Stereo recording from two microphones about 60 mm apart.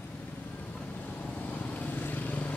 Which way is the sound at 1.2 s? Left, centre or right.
Left.